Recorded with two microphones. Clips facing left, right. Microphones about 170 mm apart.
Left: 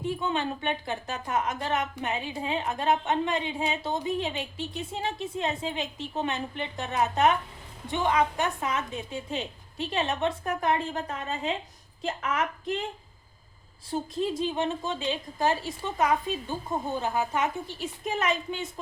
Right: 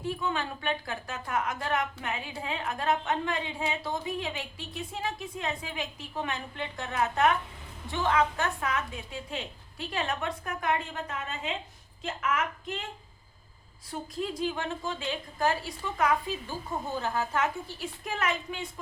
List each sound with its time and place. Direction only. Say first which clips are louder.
0.0 s a woman's voice: left 3 dB; 20° left (ahead or behind)
13.9 s a woman's voice: left 5 dB; 25° left (ahead or behind)